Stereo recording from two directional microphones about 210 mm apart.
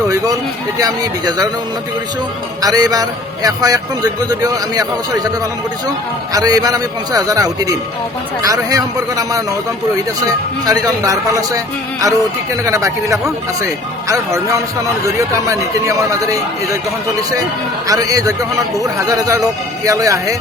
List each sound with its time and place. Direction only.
0.8 s a man's voice: 15° right (ahead or behind)
2.6 s a man's voice: 15° right (ahead or behind)
6.3 s a man's voice: 15° right (ahead or behind)
10.7 s a man's voice: 15° right (ahead or behind)
17.8 s a man's voice: 15° right (ahead or behind)